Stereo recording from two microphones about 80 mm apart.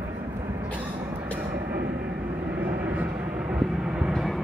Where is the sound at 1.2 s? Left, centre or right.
Right.